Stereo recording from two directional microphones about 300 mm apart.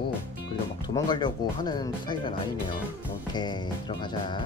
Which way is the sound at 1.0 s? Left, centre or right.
Centre.